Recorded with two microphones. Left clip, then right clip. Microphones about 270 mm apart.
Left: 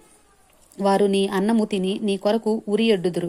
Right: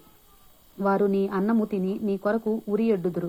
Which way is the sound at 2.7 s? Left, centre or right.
Left.